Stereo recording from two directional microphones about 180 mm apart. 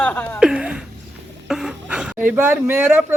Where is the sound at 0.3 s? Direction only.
5° right (ahead or behind).